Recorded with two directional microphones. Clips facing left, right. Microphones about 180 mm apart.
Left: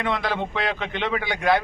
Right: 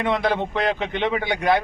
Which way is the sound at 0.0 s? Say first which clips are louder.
Right 4 dB; 20° right (ahead or behind).